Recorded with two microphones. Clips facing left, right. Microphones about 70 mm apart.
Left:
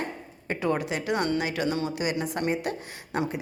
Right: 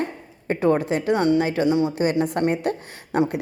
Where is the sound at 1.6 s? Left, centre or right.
Centre.